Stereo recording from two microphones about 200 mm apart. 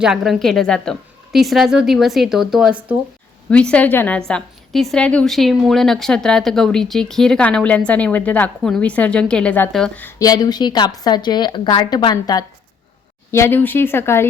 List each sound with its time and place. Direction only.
0.0 s a woman's voice: centre (ahead or behind)